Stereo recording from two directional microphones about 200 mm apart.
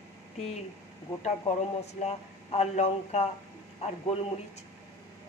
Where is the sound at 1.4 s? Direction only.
35° left (ahead or behind).